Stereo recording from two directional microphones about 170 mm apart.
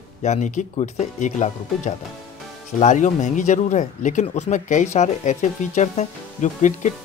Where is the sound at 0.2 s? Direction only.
45° left (ahead or behind).